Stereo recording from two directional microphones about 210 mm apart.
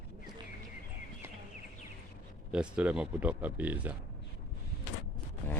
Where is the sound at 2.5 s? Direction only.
5° right (ahead or behind).